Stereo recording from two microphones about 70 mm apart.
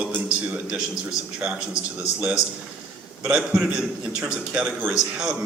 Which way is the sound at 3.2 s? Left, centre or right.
Centre.